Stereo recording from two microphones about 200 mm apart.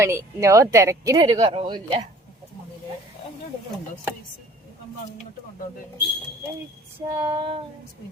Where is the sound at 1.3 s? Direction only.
30° right (ahead or behind).